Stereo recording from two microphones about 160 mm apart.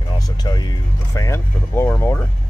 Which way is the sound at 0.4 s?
25° left (ahead or behind).